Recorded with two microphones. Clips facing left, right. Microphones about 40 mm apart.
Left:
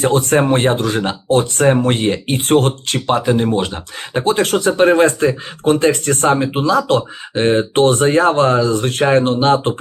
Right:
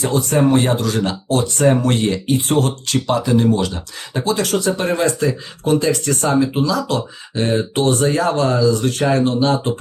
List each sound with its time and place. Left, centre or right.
0.0 s speech: left
2.3 s speech: left